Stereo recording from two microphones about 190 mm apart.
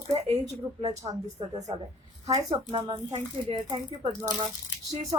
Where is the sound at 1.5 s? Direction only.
35° right (ahead or behind).